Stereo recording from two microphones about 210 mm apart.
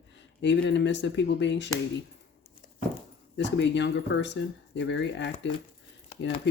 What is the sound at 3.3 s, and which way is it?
Speech, 55° left (ahead or behind).